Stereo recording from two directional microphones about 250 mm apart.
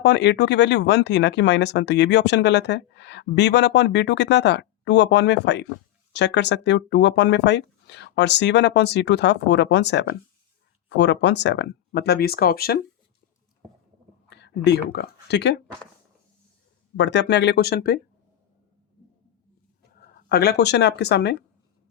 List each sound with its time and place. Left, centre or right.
0.0 s speech: left
14.3 s speech: left
15.6 s speech: centre
17.0 s speech: left
20.0 s speech: left